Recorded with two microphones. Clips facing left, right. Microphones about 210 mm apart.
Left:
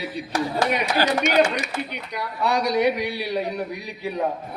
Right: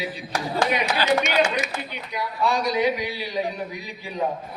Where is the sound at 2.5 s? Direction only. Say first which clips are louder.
Left 2 dB; 70° left (ahead or behind).